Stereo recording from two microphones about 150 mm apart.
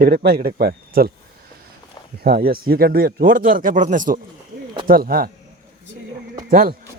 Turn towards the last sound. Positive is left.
turn(degrees=-70)  # may be behind; listen again after turning